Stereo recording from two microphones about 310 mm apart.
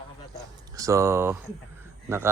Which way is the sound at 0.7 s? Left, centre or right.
Centre.